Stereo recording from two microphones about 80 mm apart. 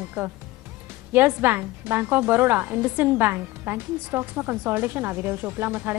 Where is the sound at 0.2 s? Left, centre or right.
Right.